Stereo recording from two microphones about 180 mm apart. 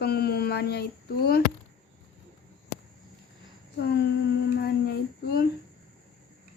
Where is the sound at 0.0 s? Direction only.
60° left (ahead or behind).